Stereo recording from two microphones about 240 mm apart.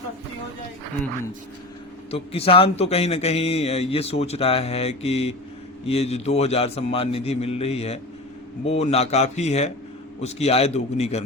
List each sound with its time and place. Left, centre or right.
2.0 s a man's voice: left